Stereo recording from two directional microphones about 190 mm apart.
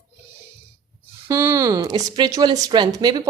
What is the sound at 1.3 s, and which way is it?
Speech, 15° right (ahead or behind).